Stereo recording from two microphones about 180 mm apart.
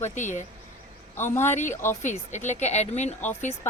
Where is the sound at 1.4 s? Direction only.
40° left (ahead or behind).